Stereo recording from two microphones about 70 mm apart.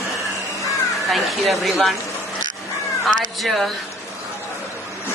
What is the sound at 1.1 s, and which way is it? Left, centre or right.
Speech, centre.